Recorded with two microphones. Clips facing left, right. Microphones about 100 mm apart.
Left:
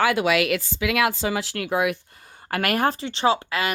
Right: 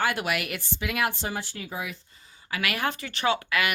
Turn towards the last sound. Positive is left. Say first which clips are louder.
# left 4 dB
turn(degrees=30)  # may be behind; listen again after turning